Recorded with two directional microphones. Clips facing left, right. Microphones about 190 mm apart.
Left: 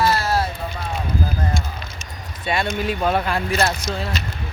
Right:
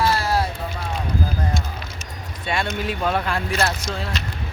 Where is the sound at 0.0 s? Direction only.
10° right (ahead or behind).